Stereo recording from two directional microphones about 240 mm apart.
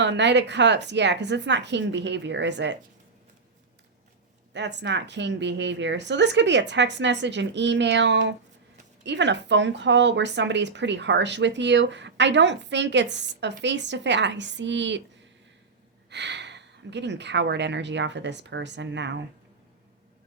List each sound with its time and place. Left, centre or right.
0.0 s speech: right
4.5 s speech: right
16.0 s speech: right